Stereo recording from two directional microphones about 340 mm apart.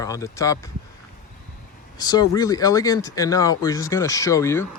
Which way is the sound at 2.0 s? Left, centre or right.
Centre.